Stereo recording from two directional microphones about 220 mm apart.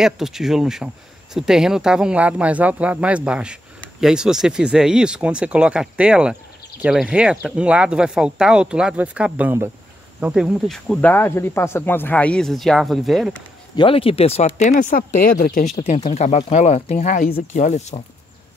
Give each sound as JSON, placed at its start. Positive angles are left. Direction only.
{"t": 0.0, "sound": "speech", "side_deg": 0}
{"t": 13.7, "sound": "speech", "side_deg": 25}
{"t": 15.7, "sound": "speech", "side_deg": 30}